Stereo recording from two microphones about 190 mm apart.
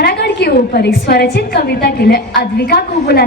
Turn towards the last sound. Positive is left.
turn(degrees=60)  # may be behind; listen again after turning